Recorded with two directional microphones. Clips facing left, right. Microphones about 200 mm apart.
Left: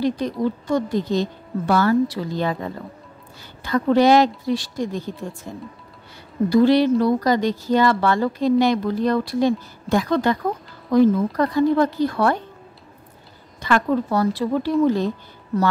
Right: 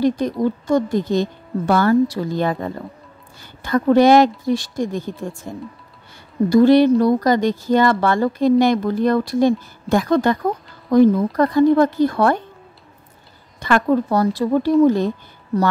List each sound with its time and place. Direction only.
0.0 s speech: 45° right (ahead or behind)
6.5 s speech: 50° right (ahead or behind)
13.6 s speech: 50° right (ahead or behind)